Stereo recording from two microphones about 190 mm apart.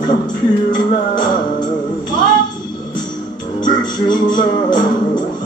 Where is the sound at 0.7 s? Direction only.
20° left (ahead or behind).